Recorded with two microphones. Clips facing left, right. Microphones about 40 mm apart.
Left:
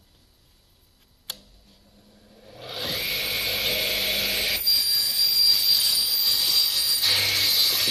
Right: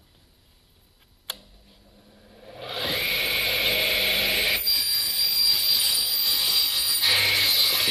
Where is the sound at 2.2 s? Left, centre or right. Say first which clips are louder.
Right 3 dB; centre.